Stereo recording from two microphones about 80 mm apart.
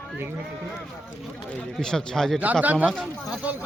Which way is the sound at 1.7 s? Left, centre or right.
Centre.